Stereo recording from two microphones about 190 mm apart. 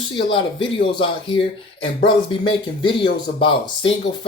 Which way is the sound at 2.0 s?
25° left (ahead or behind).